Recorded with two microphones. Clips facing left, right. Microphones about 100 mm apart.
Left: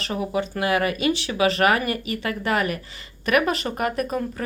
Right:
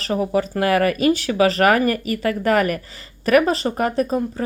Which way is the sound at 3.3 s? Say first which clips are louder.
Right 5 dB; 35° right (ahead or behind).